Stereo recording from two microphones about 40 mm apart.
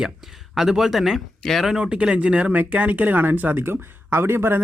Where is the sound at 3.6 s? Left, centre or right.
Right.